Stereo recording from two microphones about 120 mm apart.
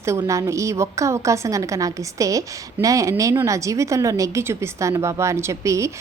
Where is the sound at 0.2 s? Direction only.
25° right (ahead or behind).